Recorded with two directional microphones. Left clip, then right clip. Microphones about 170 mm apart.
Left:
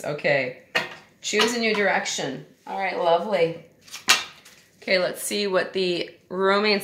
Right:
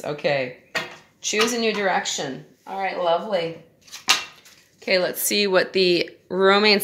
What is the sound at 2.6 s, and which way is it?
Speech, 15° right (ahead or behind).